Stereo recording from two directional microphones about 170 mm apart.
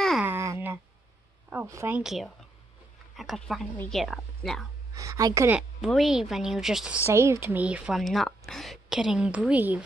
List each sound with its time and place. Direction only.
0.2 s a sound: 15° right (ahead or behind)
1.5 s speech: 15° right (ahead or behind)
3.7 s speech: 10° left (ahead or behind)
4.9 s a woman's voice: 20° right (ahead or behind)
5.6 s speech: centre (ahead or behind)
7.1 s speech: 15° right (ahead or behind)